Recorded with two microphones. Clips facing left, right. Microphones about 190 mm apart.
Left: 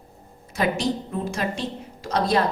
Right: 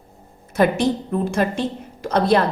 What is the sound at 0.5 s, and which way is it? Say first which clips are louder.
A woman's voice: right 6 dB; 55° right (ahead or behind).